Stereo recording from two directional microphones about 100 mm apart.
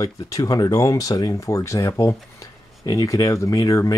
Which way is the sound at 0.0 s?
35° left (ahead or behind).